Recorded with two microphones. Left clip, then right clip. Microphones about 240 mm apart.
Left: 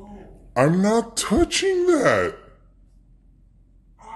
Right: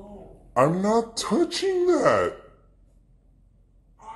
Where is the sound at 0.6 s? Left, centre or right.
Left.